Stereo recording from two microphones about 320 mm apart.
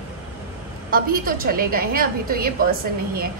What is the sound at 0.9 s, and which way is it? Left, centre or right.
A woman's voice, right.